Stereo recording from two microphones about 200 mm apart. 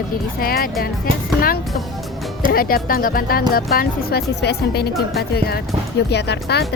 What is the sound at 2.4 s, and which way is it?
Speech, 45° left (ahead or behind).